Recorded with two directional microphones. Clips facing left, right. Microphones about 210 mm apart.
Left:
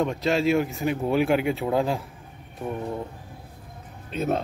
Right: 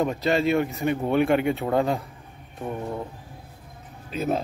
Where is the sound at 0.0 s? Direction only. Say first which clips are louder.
Even; centre (ahead or behind).